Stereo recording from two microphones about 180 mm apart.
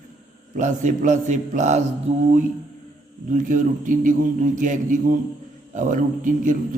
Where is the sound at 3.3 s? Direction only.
45° right (ahead or behind).